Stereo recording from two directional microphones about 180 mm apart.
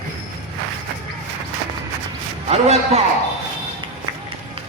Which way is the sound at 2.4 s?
35° right (ahead or behind).